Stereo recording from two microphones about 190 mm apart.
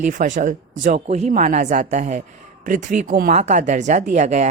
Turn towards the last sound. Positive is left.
turn(degrees=-40)  # may be behind; listen again after turning